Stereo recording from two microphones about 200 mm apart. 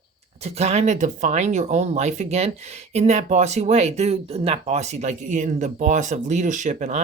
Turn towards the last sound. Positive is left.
turn(degrees=-35)  # may be behind; listen again after turning